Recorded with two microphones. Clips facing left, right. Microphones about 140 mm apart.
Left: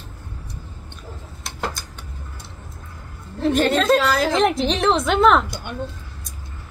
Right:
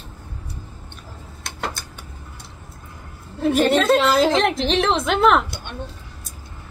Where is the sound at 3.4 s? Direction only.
5° right (ahead or behind).